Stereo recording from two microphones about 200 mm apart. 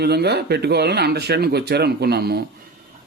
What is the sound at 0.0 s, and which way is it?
Speech, 55° right (ahead or behind).